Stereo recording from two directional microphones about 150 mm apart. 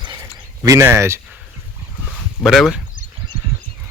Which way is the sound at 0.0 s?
25° right (ahead or behind).